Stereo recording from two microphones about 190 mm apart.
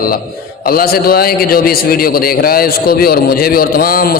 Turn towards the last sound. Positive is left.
turn(degrees=50)  # may be behind; listen again after turning